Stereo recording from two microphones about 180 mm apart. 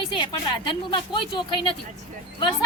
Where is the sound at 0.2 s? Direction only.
25° left (ahead or behind).